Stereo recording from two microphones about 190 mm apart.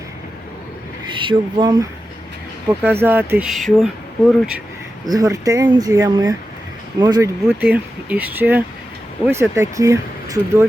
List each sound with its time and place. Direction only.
1.2 s speech: 25° right (ahead or behind)
2.6 s speech: 10° right (ahead or behind)
5.0 s speech: 20° right (ahead or behind)